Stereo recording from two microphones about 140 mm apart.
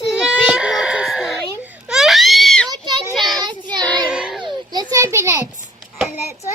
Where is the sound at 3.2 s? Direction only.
Centre (ahead or behind).